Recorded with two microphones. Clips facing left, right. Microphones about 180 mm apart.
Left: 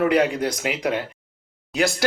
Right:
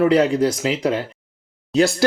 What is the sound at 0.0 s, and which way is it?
Speech, 30° right (ahead or behind).